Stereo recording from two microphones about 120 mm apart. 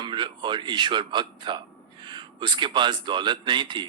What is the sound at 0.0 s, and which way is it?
Speech, 40° right (ahead or behind).